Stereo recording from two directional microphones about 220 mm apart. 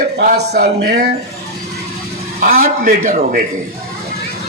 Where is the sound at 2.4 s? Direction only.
40° right (ahead or behind).